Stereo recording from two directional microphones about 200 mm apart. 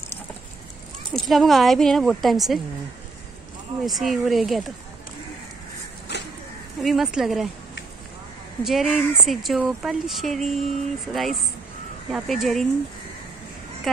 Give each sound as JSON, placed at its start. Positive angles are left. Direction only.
{"t": 1.1, "sound": "speech", "side_deg": 0}
{"t": 3.8, "sound": "speech", "side_deg": 0}
{"t": 6.1, "sound": "a sound", "side_deg": 55}
{"t": 6.8, "sound": "speech", "side_deg": 0}
{"t": 8.6, "sound": "speech", "side_deg": -5}